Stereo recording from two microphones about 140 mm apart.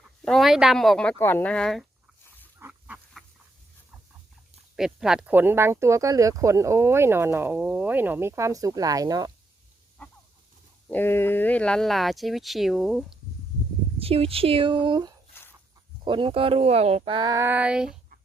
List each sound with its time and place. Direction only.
0.2 s speech: 5° left (ahead or behind)
2.6 s duck: 10° right (ahead or behind)
4.8 s speech: 5° right (ahead or behind); by 9.3 s 25° right (ahead or behind)
10.9 s speech: 15° left (ahead or behind); by 13.1 s 5° right (ahead or behind)
14.0 s speech: 45° right (ahead or behind)
17.2 s female singing: 30° right (ahead or behind)
17.4 s speech: 10° right (ahead or behind)